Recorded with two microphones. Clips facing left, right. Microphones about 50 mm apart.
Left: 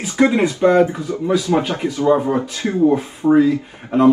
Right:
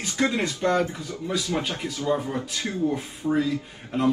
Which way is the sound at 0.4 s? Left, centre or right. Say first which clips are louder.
Left 10 dB; left.